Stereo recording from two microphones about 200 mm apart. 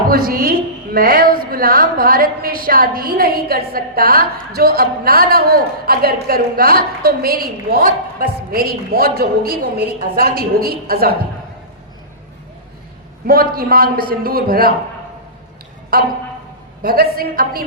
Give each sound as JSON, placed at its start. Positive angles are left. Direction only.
{"t": 0.1, "sound": "a woman's voice", "side_deg": -45}
{"t": 13.2, "sound": "a woman's voice", "side_deg": -45}
{"t": 15.9, "sound": "a woman's voice", "side_deg": -45}